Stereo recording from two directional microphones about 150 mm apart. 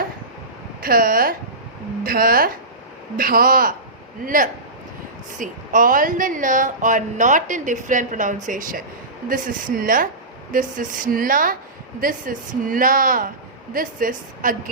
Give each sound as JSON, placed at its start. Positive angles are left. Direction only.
{"t": 0.8, "sound": "speech", "side_deg": -75}
{"t": 5.4, "sound": "speech", "side_deg": -65}